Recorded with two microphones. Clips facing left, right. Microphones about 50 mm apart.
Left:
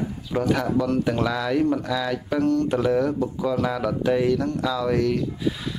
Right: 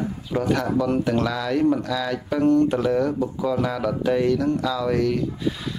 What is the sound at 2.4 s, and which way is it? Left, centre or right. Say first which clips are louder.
Speech: right 4 dB; right.